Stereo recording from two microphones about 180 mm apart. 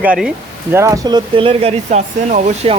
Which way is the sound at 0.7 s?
15° right (ahead or behind).